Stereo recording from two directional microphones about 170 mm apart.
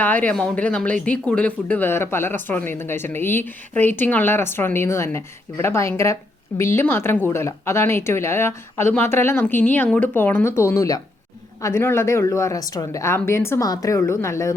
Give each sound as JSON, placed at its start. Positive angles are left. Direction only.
{"t": 0.0, "sound": "speech", "side_deg": 10}